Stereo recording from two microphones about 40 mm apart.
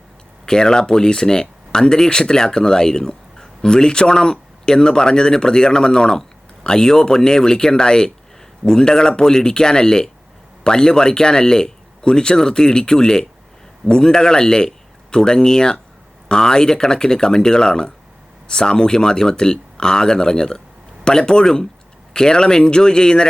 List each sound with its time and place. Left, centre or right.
0.4 s a man's voice: centre